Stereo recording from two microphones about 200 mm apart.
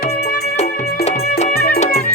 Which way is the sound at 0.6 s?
35° left (ahead or behind).